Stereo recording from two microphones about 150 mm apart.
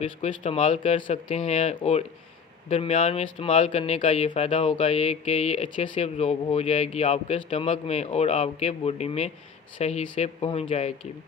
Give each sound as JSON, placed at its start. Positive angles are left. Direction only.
{"t": 0.0, "sound": "speech", "side_deg": 45}